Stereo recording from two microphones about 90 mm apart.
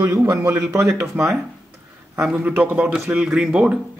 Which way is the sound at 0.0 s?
35° right (ahead or behind).